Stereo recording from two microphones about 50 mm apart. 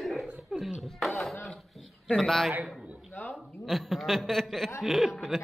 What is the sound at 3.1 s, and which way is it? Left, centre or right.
Speech, left.